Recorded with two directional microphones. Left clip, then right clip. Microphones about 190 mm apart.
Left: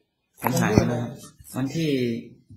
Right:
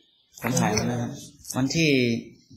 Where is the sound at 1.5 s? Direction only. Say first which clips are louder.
Right 4 dB; 20° right (ahead or behind).